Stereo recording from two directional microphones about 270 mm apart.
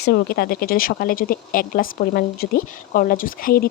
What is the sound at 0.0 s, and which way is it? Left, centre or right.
Speech, left.